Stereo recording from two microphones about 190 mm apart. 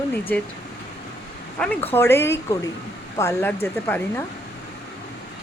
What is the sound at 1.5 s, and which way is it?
Speech, 5° left (ahead or behind).